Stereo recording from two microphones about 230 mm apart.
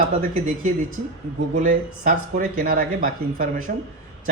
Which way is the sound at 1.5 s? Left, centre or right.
Right.